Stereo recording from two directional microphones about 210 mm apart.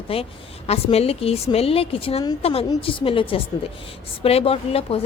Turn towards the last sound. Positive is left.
turn(degrees=25)  # may be behind; listen again after turning